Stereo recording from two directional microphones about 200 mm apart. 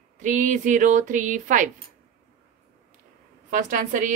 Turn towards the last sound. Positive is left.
turn(degrees=-40)  # may be behind; listen again after turning